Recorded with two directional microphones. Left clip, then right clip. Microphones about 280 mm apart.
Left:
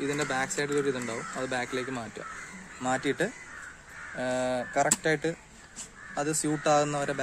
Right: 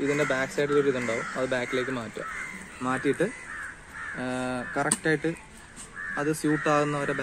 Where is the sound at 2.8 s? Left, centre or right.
Left.